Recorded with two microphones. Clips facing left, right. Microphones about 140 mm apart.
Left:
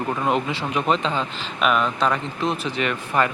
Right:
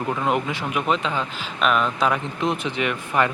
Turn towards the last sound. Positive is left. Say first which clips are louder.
# even
turn(degrees=-15)  # may be behind; listen again after turning